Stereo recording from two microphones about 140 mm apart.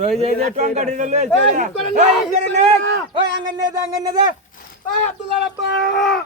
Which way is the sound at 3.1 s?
30° right (ahead or behind).